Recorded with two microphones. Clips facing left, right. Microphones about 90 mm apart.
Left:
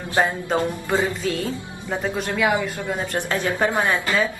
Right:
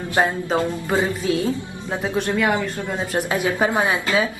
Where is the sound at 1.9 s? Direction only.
Centre (ahead or behind).